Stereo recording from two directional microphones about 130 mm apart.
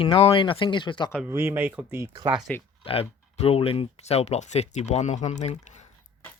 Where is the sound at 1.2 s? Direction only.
20° right (ahead or behind).